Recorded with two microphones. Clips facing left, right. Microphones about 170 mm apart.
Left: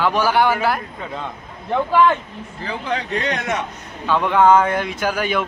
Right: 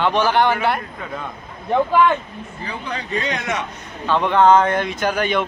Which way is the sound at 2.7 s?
75° left (ahead or behind).